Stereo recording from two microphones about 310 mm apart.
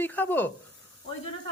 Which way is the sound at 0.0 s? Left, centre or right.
Centre.